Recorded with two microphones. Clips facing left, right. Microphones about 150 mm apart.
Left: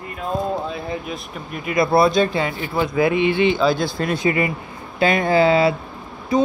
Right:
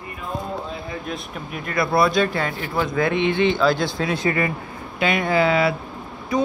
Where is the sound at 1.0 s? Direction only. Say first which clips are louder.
Even; centre (ahead or behind).